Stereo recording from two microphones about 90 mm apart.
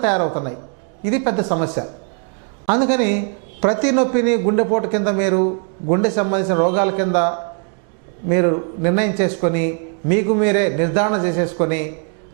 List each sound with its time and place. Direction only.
0.0 s a woman's voice: 15° right (ahead or behind)